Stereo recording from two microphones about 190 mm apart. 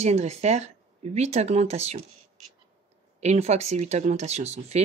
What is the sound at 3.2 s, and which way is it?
Speech, 35° right (ahead or behind).